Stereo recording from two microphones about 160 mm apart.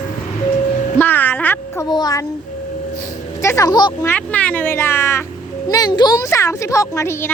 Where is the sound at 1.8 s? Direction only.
25° left (ahead or behind).